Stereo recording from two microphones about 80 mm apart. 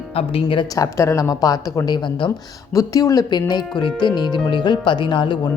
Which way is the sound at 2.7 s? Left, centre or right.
Left.